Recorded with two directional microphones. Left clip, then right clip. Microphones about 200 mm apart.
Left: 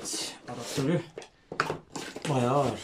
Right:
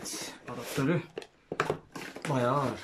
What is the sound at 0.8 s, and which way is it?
Speech, centre (ahead or behind).